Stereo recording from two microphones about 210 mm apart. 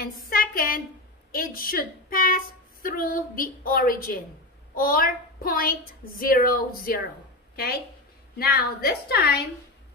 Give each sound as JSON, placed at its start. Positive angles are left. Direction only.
{"t": 0.0, "sound": "a woman's voice", "side_deg": 45}
{"t": 8.4, "sound": "a woman's voice", "side_deg": 45}